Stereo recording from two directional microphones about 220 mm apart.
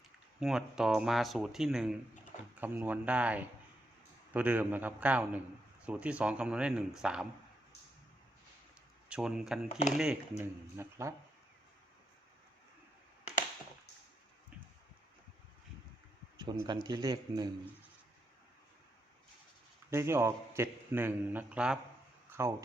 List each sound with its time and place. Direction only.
0.3 s a man's voice: centre (ahead or behind)
9.0 s speech: 5° right (ahead or behind)
9.6 s speech: 30° left (ahead or behind)
10.0 s a man's voice: 5° right (ahead or behind)
16.4 s speech: 20° right (ahead or behind)
19.9 s a man's voice: 10° right (ahead or behind)
22.3 s a sound: 10° right (ahead or behind)